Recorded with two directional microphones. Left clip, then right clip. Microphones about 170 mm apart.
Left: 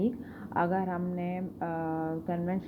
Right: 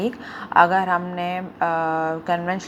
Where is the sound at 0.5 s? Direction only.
Centre (ahead or behind).